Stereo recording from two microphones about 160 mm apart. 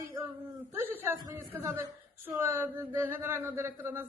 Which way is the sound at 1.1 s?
25° right (ahead or behind).